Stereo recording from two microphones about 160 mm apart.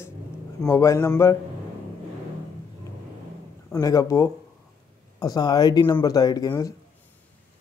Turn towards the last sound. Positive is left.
turn(degrees=25)  # may be behind; listen again after turning